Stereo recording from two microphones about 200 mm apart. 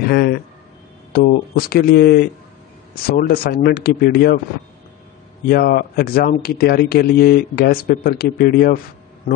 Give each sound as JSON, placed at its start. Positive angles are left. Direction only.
{"t": 0.0, "sound": "speech", "side_deg": 50}
{"t": 5.5, "sound": "speech", "side_deg": 50}